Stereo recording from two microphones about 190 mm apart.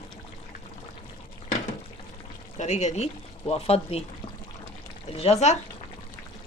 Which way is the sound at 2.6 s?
35° left (ahead or behind).